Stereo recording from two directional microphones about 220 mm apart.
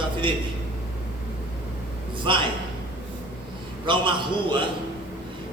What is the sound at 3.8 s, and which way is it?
Speech, 20° right (ahead or behind).